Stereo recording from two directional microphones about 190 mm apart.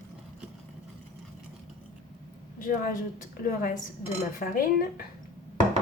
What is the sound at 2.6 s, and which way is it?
A woman's voice, 45° left (ahead or behind).